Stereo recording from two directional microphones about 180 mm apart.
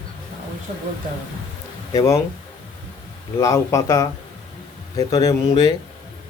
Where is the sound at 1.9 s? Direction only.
15° left (ahead or behind).